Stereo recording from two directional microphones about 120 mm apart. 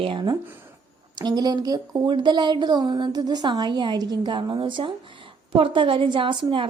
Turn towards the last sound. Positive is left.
turn(degrees=-45)  # may be behind; listen again after turning